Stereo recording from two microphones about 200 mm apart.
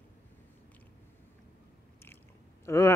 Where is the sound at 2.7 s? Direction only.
15° left (ahead or behind).